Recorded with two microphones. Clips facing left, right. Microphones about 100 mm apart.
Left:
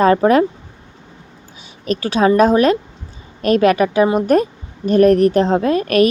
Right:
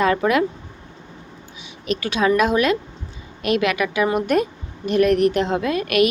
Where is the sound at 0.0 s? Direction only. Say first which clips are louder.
Left 6 dB; 35° left (ahead or behind).